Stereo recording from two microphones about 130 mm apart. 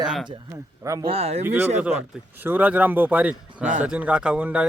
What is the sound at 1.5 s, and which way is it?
A man's voice, 15° right (ahead or behind).